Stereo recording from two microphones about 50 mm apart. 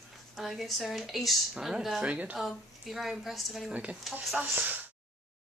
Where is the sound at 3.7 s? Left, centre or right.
Right.